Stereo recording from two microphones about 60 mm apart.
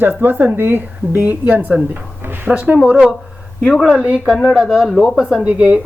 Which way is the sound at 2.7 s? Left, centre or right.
Centre.